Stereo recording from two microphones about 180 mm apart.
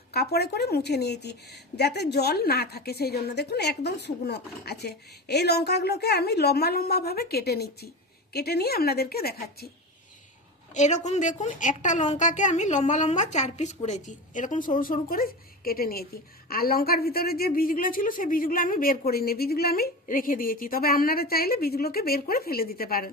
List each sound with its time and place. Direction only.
0.1 s a woman's voice: 60° left (ahead or behind)
10.8 s a woman's voice: 40° left (ahead or behind); by 23.0 s 55° left (ahead or behind)